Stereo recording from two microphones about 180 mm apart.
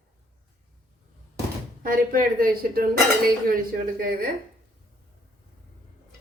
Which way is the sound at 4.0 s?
50° right (ahead or behind).